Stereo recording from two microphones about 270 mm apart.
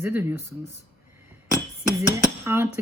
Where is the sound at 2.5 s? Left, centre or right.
Centre.